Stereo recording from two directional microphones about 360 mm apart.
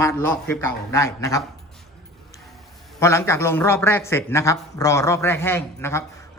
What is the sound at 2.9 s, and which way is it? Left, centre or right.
A man's voice, centre.